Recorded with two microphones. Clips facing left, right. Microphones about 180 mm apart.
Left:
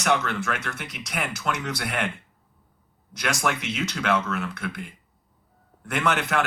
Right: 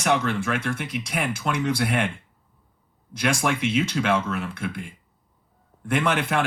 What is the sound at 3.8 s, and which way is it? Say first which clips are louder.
Speech: right 2 dB; 30° right (ahead or behind).